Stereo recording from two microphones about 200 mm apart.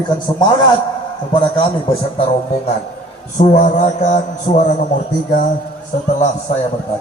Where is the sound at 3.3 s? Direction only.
35° left (ahead or behind).